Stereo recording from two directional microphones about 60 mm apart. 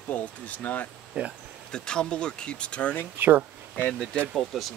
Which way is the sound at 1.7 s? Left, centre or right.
Centre.